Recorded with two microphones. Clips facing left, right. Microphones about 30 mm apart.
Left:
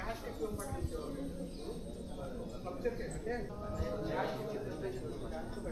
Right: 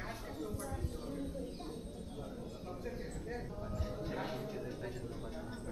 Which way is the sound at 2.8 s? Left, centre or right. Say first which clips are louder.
Left 8 dB; centre.